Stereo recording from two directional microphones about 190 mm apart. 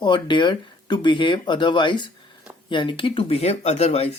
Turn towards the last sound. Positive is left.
turn(degrees=35)  # may be behind; listen again after turning